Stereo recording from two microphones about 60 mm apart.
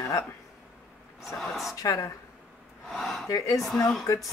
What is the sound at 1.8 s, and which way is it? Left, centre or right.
Speech, left.